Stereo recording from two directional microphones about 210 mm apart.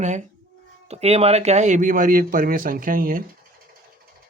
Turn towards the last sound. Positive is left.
turn(degrees=-40)  # may be behind; listen again after turning